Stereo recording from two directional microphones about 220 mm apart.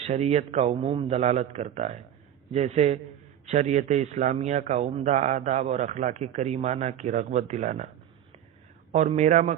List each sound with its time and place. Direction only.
0.0 s a man's voice: 30° right (ahead or behind)
8.9 s a man's voice: 30° right (ahead or behind)